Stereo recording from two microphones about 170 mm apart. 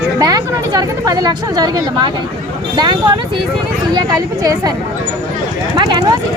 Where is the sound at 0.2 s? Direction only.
20° right (ahead or behind).